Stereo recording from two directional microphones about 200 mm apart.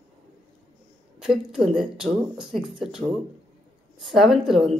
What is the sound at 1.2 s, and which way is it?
A woman's voice, centre (ahead or behind).